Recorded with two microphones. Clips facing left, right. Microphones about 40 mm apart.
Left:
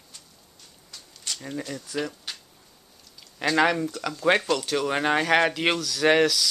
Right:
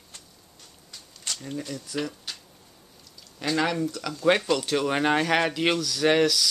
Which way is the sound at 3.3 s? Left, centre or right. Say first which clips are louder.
Left 4 dB; left.